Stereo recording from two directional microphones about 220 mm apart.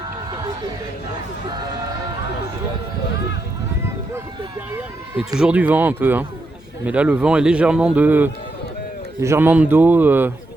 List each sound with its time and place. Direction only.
1.5 s speech: 20° right (ahead or behind)
5.4 s a man's voice: 5° right (ahead or behind)